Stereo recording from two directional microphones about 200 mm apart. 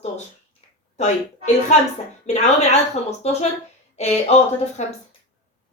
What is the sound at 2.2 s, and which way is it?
Speech, 35° left (ahead or behind).